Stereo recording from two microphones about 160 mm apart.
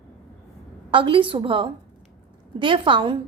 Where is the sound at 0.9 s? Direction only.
30° right (ahead or behind).